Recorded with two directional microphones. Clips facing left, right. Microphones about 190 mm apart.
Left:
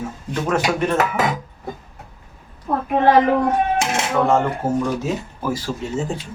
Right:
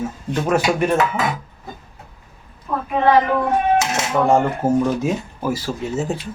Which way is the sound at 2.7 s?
40° left (ahead or behind).